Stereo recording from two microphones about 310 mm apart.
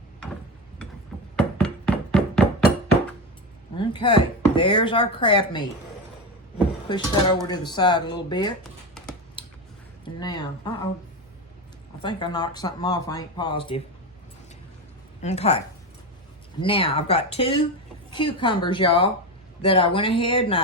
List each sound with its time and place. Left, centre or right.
1.4 s music: centre
3.8 s speech: centre
6.8 s speech: centre
10.0 s speech: centre
12.0 s speech: centre
15.2 s a woman's voice: left